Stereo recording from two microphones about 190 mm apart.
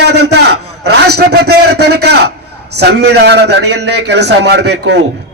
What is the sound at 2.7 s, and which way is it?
A man's voice, 60° right (ahead or behind).